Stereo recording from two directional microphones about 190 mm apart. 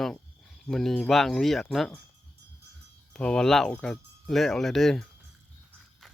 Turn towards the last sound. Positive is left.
turn(degrees=0)  # may be behind; listen again after turning